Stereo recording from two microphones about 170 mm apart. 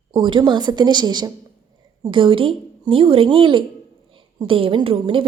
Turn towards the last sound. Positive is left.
turn(degrees=-35)  # may be behind; listen again after turning